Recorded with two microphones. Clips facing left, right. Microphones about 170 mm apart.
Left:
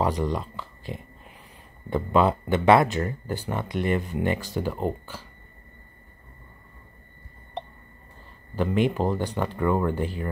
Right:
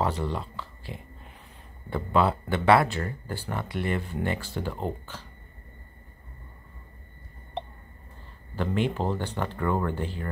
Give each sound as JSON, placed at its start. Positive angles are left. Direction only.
{"t": 0.0, "sound": "speech", "side_deg": 15}
{"t": 7.6, "sound": "a sound", "side_deg": -5}
{"t": 8.5, "sound": "speech", "side_deg": 15}